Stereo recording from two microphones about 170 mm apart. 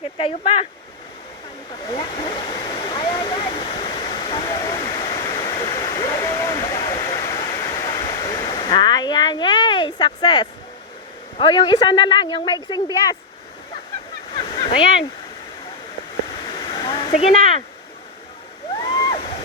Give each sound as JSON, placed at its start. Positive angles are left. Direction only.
{"t": 0.2, "sound": "speech", "side_deg": 35}
{"t": 1.9, "sound": "waterfall", "side_deg": 35}
{"t": 7.3, "sound": "a sound", "side_deg": 25}
{"t": 11.3, "sound": "speech", "side_deg": 30}
{"t": 14.3, "sound": "a sound", "side_deg": 30}
{"t": 16.3, "sound": "waterfall", "side_deg": 30}
{"t": 17.1, "sound": "speech", "side_deg": 35}
{"t": 18.8, "sound": "waterfall", "side_deg": 30}